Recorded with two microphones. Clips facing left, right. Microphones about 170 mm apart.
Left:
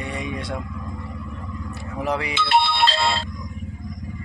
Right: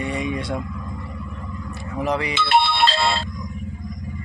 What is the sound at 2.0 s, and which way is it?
Speech, 5° left (ahead or behind).